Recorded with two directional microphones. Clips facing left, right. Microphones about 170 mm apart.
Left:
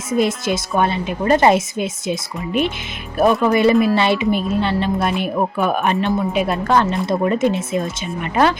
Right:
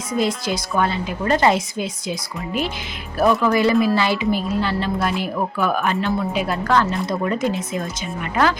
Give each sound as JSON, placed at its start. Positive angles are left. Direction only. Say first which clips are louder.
{"t": 0.1, "sound": "a woman's voice", "louder": "left 4 dB", "side_deg": 20}